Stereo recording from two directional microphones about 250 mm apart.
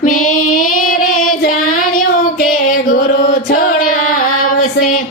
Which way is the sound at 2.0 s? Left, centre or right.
Left.